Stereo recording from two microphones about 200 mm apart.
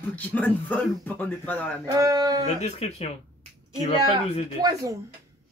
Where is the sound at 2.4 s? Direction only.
30° left (ahead or behind).